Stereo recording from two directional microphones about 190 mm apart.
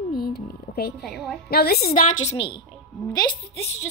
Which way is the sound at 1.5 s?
55° left (ahead or behind).